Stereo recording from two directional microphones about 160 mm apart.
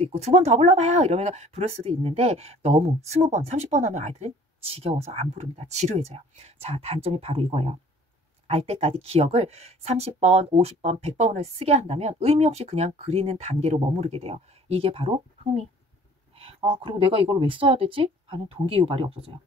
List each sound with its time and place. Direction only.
0.0 s speech: 40° right (ahead or behind)
16.3 s a sound: 35° right (ahead or behind)
16.8 s speech: 35° right (ahead or behind)